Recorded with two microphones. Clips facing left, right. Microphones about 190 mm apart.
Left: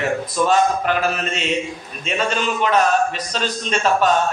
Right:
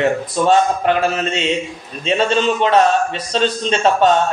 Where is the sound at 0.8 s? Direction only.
30° right (ahead or behind).